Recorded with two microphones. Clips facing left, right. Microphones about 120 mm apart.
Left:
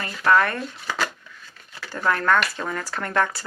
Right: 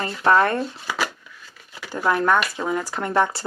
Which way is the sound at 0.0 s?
25° right (ahead or behind).